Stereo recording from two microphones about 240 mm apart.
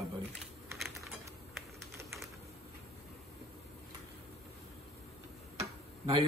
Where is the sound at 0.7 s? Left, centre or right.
Centre.